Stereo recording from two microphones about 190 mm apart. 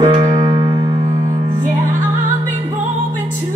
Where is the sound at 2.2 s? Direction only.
40° right (ahead or behind).